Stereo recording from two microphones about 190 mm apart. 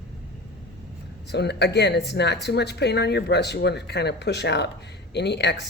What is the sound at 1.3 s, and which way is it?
Speech, 60° left (ahead or behind).